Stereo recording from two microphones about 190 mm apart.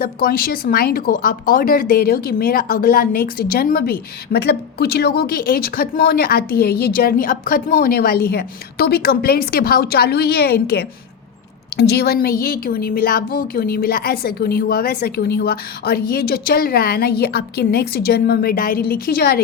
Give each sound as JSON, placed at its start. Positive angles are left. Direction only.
{"t": 0.0, "sound": "speech", "side_deg": 50}